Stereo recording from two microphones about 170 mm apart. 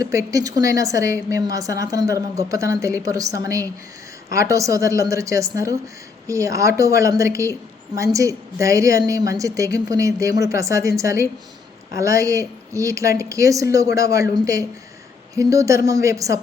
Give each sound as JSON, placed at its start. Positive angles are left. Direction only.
{"t": 0.0, "sound": "a woman's voice", "side_deg": -20}